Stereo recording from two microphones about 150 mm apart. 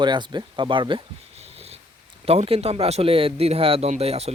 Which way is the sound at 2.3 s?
40° right (ahead or behind).